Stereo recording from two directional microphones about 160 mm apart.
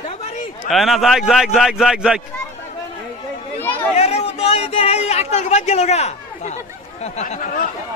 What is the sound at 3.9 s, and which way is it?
Speech, 40° left (ahead or behind).